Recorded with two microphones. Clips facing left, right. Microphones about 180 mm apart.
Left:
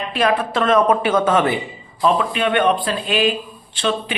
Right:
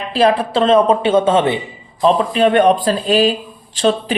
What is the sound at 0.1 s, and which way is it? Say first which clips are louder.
A woman's voice: right 5 dB; 30° right (ahead or behind).